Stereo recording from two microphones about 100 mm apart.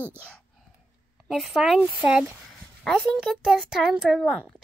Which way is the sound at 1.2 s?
Centre (ahead or behind).